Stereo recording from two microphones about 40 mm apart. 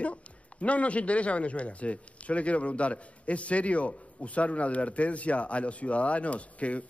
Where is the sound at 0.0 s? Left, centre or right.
Left.